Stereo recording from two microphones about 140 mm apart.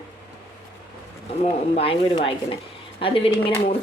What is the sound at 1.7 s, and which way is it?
Speech, 40° left (ahead or behind).